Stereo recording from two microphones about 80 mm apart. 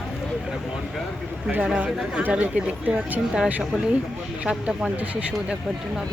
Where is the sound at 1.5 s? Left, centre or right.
Centre.